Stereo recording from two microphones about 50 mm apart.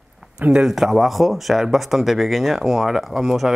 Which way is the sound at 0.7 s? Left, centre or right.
Centre.